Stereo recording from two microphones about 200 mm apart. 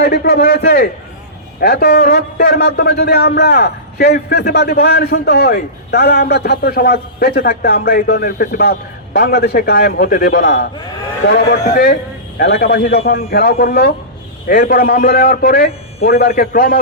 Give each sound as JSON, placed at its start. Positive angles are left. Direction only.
{"t": 0.0, "sound": "a man's voice", "side_deg": 50}